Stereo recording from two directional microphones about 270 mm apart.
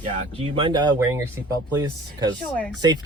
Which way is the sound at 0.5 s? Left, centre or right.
Centre.